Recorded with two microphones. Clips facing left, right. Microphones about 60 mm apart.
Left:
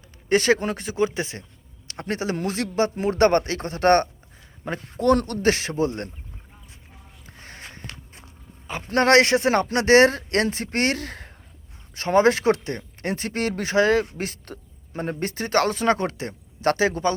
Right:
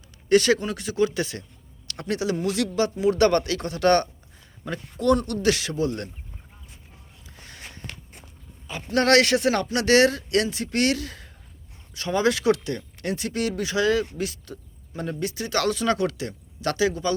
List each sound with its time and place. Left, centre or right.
0.3 s speech: left
7.3 s a sound: left
8.6 s speech: left